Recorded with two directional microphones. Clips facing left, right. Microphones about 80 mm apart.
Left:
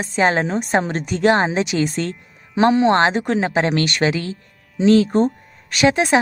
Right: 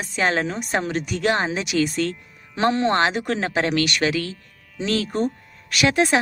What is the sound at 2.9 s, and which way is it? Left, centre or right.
Speech, left.